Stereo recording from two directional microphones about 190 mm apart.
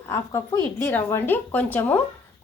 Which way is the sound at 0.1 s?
15° left (ahead or behind).